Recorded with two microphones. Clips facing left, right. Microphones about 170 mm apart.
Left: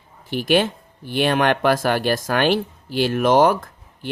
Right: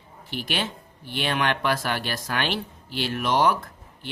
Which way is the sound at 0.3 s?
45° left (ahead or behind).